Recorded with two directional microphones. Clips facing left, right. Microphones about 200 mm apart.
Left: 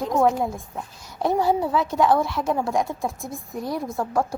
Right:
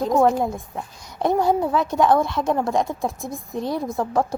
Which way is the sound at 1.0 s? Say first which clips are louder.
Right 2 dB; 15° right (ahead or behind).